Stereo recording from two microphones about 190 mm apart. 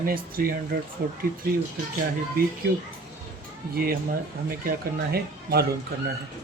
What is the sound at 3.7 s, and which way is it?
Speech, 50° right (ahead or behind).